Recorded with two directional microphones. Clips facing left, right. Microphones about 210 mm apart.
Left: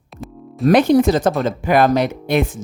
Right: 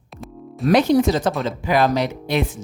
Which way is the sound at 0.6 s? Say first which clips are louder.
Left 3 dB; 55° left (ahead or behind).